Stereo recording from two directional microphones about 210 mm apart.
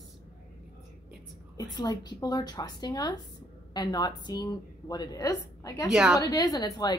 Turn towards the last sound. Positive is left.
turn(degrees=20)  # may be behind; listen again after turning